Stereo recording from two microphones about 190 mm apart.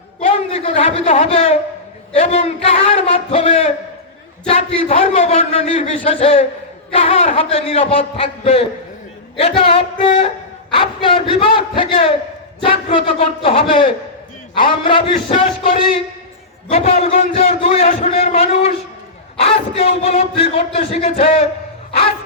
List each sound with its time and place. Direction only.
0.2 s a woman's voice: 30° left (ahead or behind)